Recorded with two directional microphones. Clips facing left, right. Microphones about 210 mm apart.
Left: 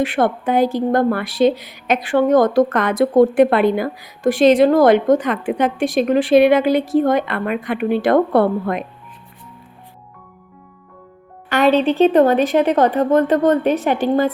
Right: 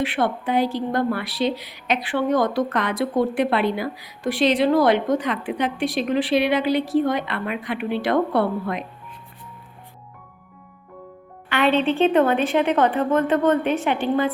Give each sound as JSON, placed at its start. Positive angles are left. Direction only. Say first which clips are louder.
{"t": 0.0, "sound": "a woman's voice", "louder": "left 5 dB", "side_deg": 45}
{"t": 11.4, "sound": "a woman's voice", "louder": "left 5 dB", "side_deg": 40}